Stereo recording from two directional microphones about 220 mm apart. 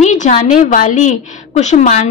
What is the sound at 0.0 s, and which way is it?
A woman's voice, 35° left (ahead or behind).